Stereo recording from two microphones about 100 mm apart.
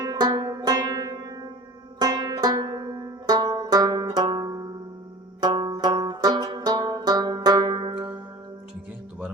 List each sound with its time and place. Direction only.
0.0 s music: 45° right (ahead or behind)